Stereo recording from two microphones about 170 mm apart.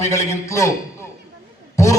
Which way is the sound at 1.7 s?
20° left (ahead or behind).